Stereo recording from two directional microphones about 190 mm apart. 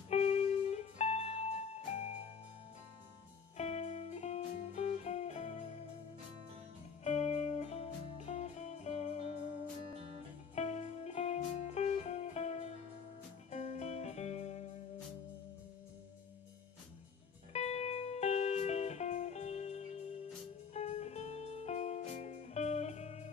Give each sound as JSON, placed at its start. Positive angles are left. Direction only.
{"t": 0.1, "sound": "music", "side_deg": 35}
{"t": 3.5, "sound": "music", "side_deg": 35}
{"t": 7.1, "sound": "music", "side_deg": 35}
{"t": 10.5, "sound": "music", "side_deg": 35}
{"t": 17.5, "sound": "music", "side_deg": 35}